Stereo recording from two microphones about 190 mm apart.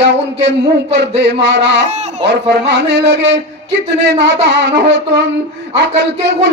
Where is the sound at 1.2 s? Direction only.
65° right (ahead or behind).